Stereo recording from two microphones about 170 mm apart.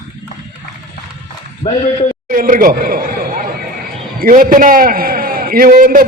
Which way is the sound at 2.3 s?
55° right (ahead or behind).